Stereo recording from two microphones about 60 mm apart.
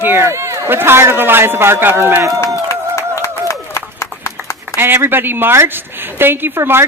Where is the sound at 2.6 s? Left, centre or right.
Left.